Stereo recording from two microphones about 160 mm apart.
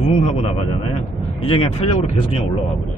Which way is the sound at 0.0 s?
40° left (ahead or behind).